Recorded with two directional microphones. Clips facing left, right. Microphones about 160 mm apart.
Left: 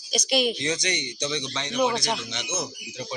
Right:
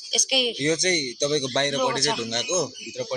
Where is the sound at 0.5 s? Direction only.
50° right (ahead or behind).